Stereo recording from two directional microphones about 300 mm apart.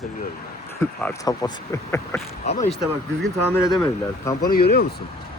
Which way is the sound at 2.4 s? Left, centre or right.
Left.